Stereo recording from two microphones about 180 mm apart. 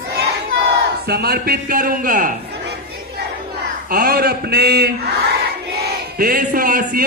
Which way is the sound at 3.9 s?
55° right (ahead or behind).